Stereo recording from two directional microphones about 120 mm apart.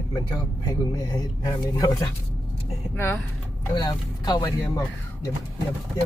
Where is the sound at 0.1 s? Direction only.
35° left (ahead or behind).